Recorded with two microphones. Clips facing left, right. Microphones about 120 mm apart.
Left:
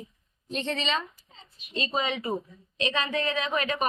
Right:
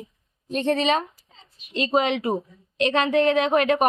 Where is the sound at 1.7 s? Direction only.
75° right (ahead or behind).